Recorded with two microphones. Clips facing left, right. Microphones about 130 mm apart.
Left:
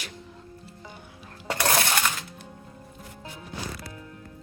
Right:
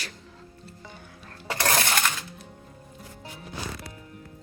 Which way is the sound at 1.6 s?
5° left (ahead or behind).